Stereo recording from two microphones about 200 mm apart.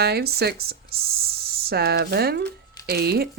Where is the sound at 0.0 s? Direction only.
55° right (ahead or behind).